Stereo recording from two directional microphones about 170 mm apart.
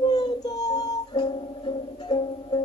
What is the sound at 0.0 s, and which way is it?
Music, 25° left (ahead or behind).